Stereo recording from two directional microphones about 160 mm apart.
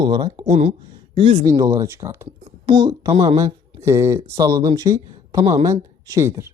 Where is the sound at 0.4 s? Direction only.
50° right (ahead or behind).